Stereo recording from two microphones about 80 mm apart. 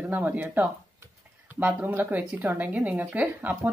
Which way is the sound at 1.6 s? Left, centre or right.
Right.